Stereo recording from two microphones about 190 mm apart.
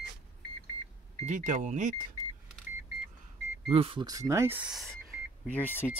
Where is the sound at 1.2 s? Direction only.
45° right (ahead or behind).